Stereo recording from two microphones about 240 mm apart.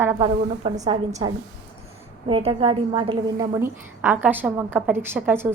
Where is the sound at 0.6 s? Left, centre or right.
Right.